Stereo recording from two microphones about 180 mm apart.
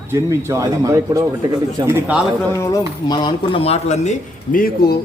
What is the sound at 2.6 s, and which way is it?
Speech, 20° left (ahead or behind).